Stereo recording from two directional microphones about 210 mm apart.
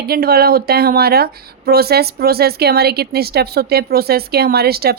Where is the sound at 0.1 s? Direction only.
45° right (ahead or behind).